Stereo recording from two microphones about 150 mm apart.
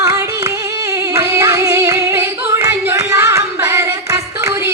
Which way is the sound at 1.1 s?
20° right (ahead or behind).